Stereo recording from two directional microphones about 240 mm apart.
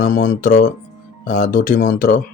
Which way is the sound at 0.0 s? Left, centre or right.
Left.